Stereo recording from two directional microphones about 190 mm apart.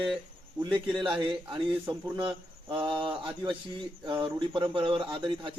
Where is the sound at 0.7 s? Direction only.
25° right (ahead or behind).